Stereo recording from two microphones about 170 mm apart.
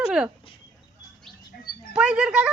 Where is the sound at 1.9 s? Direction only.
5° right (ahead or behind).